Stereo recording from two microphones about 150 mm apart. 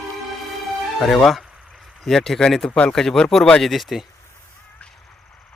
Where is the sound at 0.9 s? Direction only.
Centre (ahead or behind).